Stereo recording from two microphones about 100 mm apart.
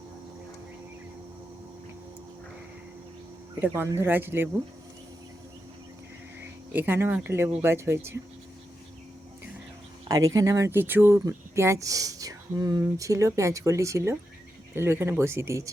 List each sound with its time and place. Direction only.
3.6 s speech: 25° right (ahead or behind)
6.4 s speech: 20° right (ahead or behind)
10.1 s speech: 35° right (ahead or behind)